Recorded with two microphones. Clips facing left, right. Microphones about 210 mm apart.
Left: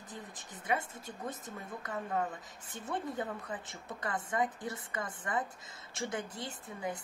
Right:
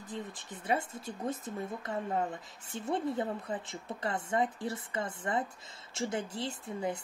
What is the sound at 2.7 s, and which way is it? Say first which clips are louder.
Speech: right 5 dB; 30° right (ahead or behind).